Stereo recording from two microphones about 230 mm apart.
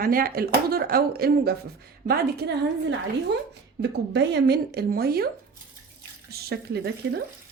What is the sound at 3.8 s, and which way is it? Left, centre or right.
Speech, right.